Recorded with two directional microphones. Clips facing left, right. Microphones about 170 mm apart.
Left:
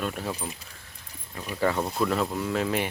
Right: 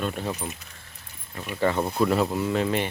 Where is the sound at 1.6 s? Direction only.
Centre (ahead or behind).